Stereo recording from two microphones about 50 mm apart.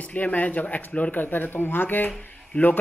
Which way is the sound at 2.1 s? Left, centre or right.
Left.